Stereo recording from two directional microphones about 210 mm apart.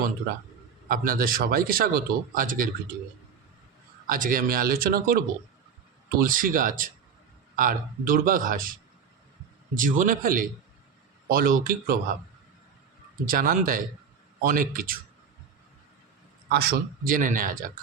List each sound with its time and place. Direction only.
0.9 s speech: 45° right (ahead or behind)
4.0 s speech: 40° right (ahead or behind)
9.7 s speech: 40° right (ahead or behind)
13.2 s speech: 40° right (ahead or behind)
16.5 s speech: 50° right (ahead or behind)